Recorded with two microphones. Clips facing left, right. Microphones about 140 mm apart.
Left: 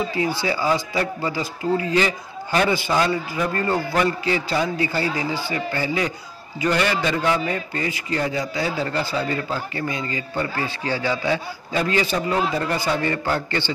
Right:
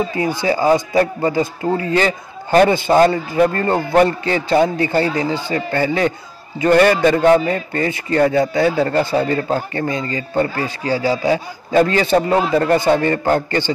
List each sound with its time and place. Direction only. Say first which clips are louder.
0.2 s a man's voice: right 6 dB; 45° right (ahead or behind)